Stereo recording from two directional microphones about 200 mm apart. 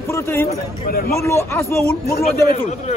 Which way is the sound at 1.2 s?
15° left (ahead or behind).